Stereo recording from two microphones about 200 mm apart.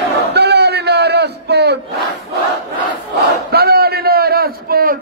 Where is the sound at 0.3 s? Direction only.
55° right (ahead or behind).